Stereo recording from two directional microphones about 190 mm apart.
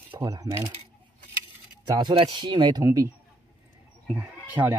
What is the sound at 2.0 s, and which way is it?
Speech, 25° right (ahead or behind).